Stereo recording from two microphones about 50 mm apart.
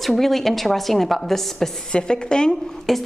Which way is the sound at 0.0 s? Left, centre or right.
Centre.